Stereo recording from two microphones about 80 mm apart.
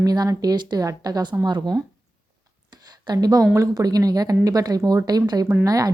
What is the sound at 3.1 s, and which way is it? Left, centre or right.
A woman's voice, right.